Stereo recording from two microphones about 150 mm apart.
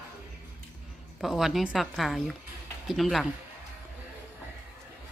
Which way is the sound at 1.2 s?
Centre (ahead or behind).